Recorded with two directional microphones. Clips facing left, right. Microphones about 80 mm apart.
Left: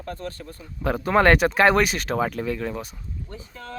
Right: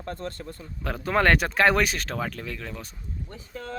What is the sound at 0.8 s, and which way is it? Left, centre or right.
Speech, centre.